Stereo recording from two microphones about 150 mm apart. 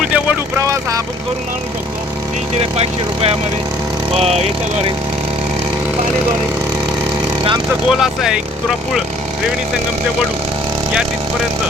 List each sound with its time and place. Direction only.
0.0 s vehicle: 10° right (ahead or behind)
2.6 s speech: 40° right (ahead or behind)
7.9 s speech: 5° right (ahead or behind)